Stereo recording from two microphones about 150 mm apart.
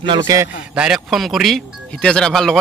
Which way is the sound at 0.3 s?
25° right (ahead or behind).